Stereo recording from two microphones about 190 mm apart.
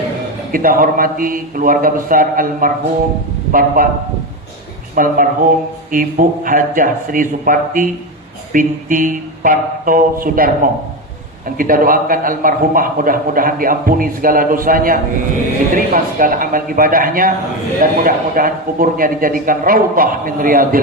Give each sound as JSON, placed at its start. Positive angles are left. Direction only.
{"t": 0.5, "sound": "a man's voice", "side_deg": -50}
{"t": 4.9, "sound": "a man's voice", "side_deg": -45}